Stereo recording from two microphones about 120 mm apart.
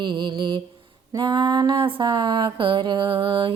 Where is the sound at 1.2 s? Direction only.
40° right (ahead or behind).